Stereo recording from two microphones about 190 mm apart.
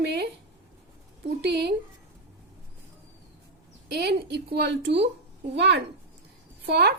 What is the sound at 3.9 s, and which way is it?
Speech, 60° right (ahead or behind).